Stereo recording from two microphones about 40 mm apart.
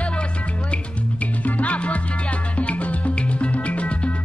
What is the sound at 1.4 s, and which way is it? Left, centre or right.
Music, left.